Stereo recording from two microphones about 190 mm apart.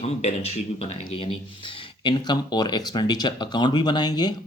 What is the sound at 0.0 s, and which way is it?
Speech, 35° left (ahead or behind).